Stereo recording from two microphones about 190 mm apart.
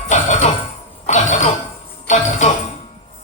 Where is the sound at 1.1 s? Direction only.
35° left (ahead or behind).